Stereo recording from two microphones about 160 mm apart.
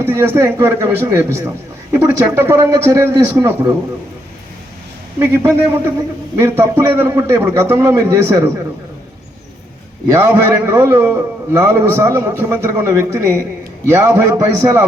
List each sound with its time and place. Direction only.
0.0 s a man's voice: 15° right (ahead or behind)
5.2 s a man's voice: 15° right (ahead or behind)
10.1 s a man's voice: 15° right (ahead or behind)